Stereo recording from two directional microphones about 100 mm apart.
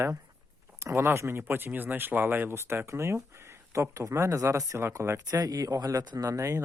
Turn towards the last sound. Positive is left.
turn(degrees=-35)  # may be behind; listen again after turning